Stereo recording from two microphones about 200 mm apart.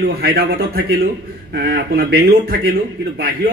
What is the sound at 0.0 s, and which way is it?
A man's voice, 50° right (ahead or behind).